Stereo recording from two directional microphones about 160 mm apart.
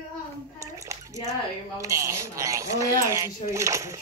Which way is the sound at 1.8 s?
20° right (ahead or behind).